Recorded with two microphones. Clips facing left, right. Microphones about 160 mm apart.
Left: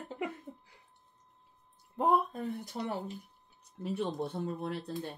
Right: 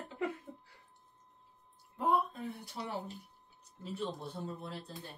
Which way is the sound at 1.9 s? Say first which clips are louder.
Left 3 dB; 45° left (ahead or behind).